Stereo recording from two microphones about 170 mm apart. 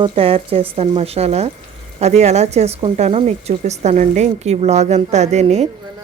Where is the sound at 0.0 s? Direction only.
35° right (ahead or behind).